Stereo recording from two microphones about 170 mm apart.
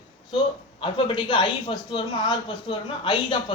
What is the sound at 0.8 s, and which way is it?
A man's voice, 25° left (ahead or behind).